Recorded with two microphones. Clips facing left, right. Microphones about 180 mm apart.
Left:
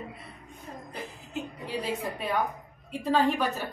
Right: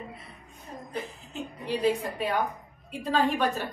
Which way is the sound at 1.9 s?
Centre (ahead or behind).